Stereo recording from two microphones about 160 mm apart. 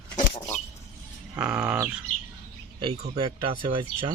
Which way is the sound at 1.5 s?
20° right (ahead or behind).